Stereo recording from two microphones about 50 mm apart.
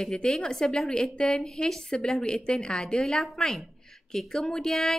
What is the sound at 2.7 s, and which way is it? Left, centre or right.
A woman's voice, centre.